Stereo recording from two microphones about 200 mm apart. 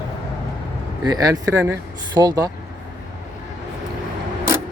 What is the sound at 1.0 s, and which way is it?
Speech, 20° right (ahead or behind).